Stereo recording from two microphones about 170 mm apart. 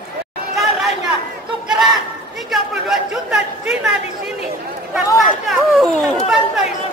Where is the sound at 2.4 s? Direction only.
Centre (ahead or behind).